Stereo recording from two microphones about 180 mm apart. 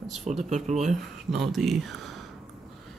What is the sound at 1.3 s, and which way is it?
Speech, centre (ahead or behind).